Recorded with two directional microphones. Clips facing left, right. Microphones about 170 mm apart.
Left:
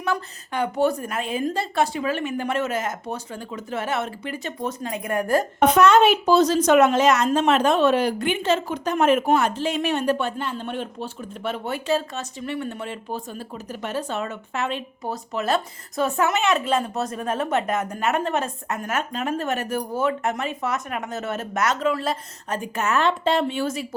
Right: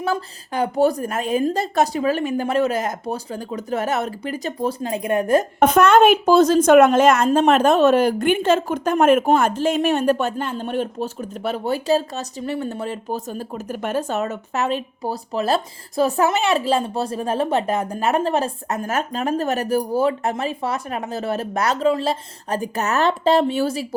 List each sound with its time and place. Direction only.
0.0 s a woman's voice: 35° right (ahead or behind)
5.5 s a woman's voice: 50° right (ahead or behind)